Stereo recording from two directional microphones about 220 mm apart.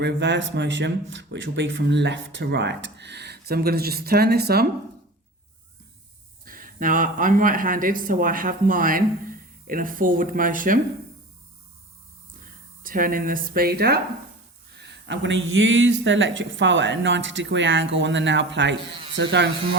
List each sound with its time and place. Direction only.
0.0 s speech: 55° right (ahead or behind)
6.4 s a man's voice: 40° right (ahead or behind)
12.4 s speech: 40° right (ahead or behind)